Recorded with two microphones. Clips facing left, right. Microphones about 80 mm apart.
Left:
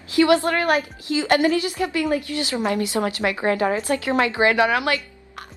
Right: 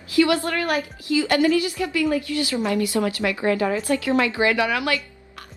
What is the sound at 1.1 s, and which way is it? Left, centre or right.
A woman's voice, left.